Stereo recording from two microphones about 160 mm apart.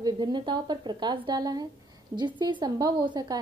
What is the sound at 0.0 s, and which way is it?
A woman's voice, 30° right (ahead or behind).